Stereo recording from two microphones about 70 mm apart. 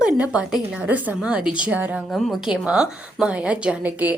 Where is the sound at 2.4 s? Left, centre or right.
Centre.